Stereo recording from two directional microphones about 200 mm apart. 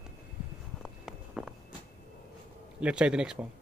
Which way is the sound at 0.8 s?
5° right (ahead or behind).